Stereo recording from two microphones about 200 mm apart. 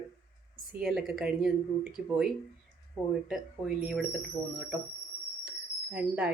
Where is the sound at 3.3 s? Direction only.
Centre (ahead or behind).